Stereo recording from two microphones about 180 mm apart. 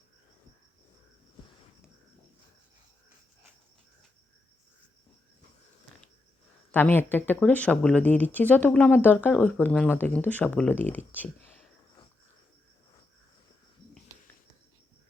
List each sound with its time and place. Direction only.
6.7 s speech: 10° left (ahead or behind)